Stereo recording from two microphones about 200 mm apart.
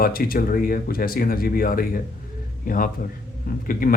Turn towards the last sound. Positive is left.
turn(degrees=45)  # may be behind; listen again after turning